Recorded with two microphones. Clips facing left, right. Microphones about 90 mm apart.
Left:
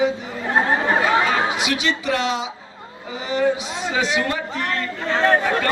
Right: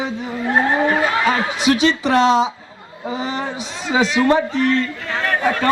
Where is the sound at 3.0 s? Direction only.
35° right (ahead or behind).